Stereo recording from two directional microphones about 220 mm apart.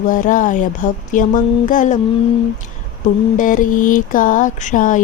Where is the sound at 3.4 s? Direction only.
35° left (ahead or behind).